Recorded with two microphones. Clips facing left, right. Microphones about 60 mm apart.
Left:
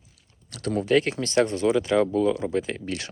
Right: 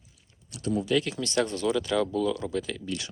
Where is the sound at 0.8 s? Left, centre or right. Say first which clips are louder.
Left 7 dB; left.